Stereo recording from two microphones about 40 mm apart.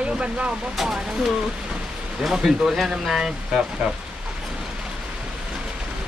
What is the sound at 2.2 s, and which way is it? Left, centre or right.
Speech, centre.